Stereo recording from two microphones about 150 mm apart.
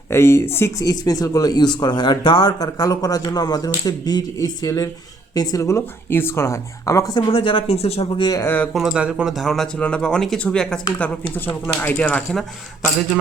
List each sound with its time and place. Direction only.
0.1 s speech: 15° left (ahead or behind); by 8.0 s 40° left (ahead or behind)
8.2 s speech: 20° left (ahead or behind)
8.7 s speech: 5° right (ahead or behind)